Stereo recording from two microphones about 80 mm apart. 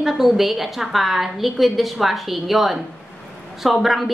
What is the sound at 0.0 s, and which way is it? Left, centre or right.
A woman's voice, centre.